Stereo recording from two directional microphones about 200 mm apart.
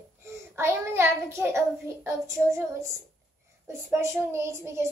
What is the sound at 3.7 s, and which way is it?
A child's voice, 10° right (ahead or behind).